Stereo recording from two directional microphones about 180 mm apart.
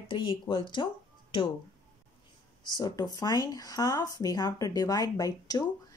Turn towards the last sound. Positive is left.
turn(degrees=20)  # may be behind; listen again after turning